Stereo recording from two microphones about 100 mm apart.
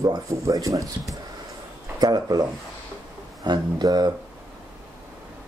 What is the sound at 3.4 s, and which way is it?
Speech, 40° right (ahead or behind).